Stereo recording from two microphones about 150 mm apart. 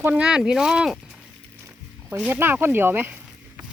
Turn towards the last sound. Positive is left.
turn(degrees=-15)  # may be behind; listen again after turning